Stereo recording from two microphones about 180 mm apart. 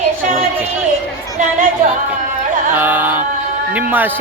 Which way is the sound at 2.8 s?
10° right (ahead or behind).